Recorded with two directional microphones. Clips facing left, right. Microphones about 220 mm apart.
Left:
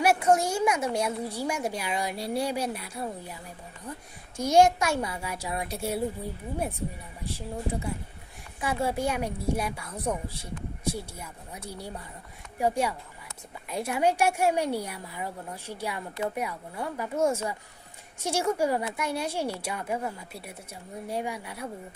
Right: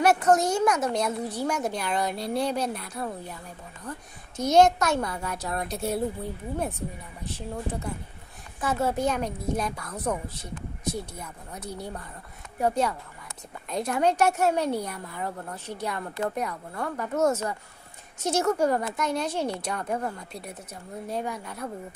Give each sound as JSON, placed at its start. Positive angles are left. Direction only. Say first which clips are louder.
{"t": 0.0, "sound": "a woman's voice", "louder": "right 2 dB", "side_deg": 10}
{"t": 4.4, "sound": "a woman's voice", "louder": "right 1 dB", "side_deg": 10}
{"t": 7.3, "sound": "a woman's voice", "louder": "even", "side_deg": 10}